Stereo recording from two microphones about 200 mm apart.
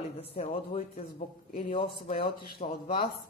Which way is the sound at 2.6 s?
35° left (ahead or behind).